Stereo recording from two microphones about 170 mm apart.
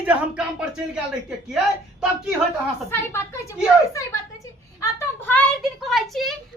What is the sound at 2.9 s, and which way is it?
A woman's voice, 15° left (ahead or behind).